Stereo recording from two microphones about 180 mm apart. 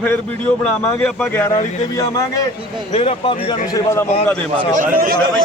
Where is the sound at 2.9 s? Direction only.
35° left (ahead or behind).